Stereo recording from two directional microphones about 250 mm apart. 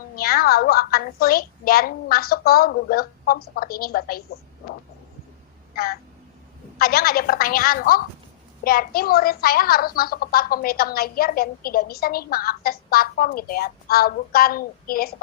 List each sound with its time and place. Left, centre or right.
0.2 s a woman's voice: left
5.7 s a woman's voice: left